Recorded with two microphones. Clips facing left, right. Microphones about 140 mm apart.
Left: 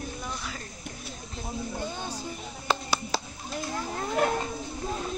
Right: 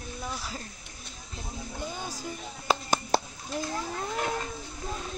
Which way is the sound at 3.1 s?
55° right (ahead or behind).